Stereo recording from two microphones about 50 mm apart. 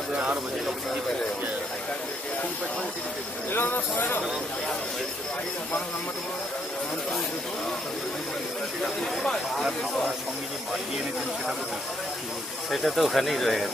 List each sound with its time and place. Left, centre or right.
3.5 s speech: left
8.8 s speech: centre
12.7 s speech: centre